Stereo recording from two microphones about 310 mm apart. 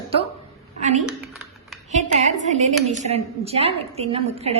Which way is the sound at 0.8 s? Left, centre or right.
Right.